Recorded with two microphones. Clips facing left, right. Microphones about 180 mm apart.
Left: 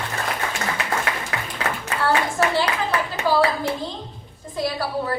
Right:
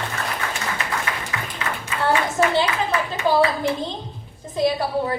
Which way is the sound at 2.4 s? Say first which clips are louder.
Right 3 dB; 20° right (ahead or behind).